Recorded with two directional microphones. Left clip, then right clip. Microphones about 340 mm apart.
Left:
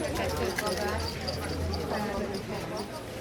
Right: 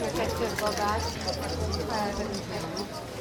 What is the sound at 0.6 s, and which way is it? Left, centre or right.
Speech, right.